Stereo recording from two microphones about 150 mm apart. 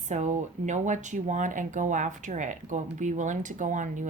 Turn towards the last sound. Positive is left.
turn(degrees=-55)  # may be behind; listen again after turning